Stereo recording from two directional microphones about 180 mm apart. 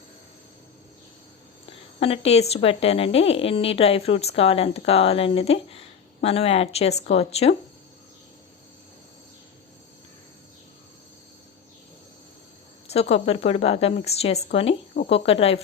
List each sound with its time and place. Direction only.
1.6 s speech: 30° left (ahead or behind)
12.9 s speech: 35° left (ahead or behind)